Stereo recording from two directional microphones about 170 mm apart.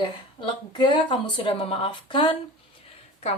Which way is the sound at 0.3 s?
30° left (ahead or behind).